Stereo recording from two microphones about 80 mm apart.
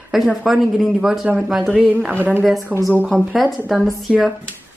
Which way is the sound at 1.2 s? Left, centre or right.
Centre.